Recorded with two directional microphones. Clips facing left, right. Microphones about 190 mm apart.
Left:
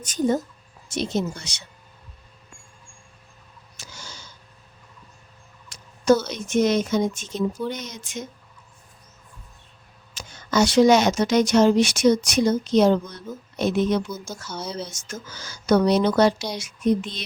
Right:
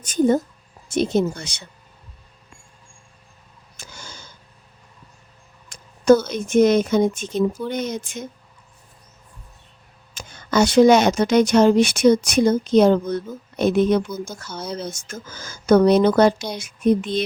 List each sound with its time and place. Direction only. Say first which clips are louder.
0.0 s a woman's voice: right 5 dB; 55° right (ahead or behind)
3.8 s a sound: right 2 dB; 55° right (ahead or behind)
5.6 s a woman's voice: right 4 dB; 50° right (ahead or behind)
10.2 s a woman's voice: right 2 dB; 55° right (ahead or behind)